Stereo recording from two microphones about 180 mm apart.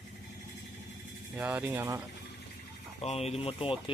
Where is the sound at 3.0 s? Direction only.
35° left (ahead or behind).